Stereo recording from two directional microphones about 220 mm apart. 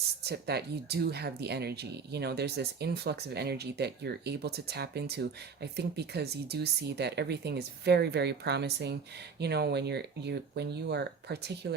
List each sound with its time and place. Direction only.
0.3 s speech: 50° right (ahead or behind)